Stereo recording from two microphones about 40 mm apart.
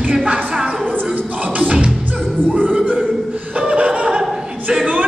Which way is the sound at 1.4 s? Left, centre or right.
Right.